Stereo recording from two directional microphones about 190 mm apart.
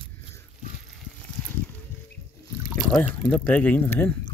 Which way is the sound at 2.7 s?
Centre (ahead or behind).